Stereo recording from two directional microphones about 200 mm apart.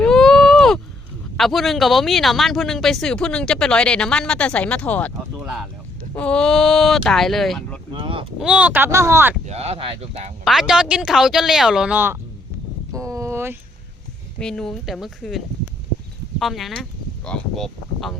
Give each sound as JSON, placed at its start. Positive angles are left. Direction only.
{"t": 0.0, "sound": "a sound", "side_deg": 5}
{"t": 1.4, "sound": "speech", "side_deg": 0}
{"t": 7.9, "sound": "speech", "side_deg": -25}
{"t": 8.4, "sound": "speech", "side_deg": -5}
{"t": 9.5, "sound": "speech", "side_deg": -30}
{"t": 10.4, "sound": "speech", "side_deg": 0}
{"t": 12.9, "sound": "a sound", "side_deg": -15}
{"t": 14.3, "sound": "speech", "side_deg": 5}